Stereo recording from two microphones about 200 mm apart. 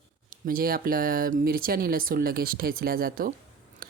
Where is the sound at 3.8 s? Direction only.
45° right (ahead or behind).